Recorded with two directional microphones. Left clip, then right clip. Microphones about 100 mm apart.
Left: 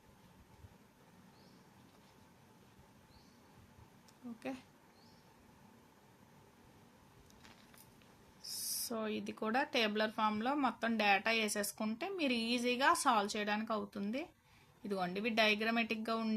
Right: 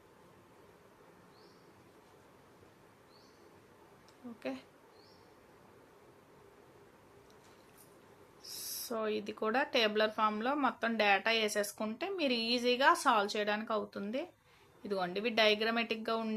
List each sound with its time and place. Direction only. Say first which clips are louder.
8.4 s speech: left 1 dB; 35° left (ahead or behind)